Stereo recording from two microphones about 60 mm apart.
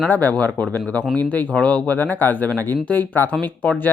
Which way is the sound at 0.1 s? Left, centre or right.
Left.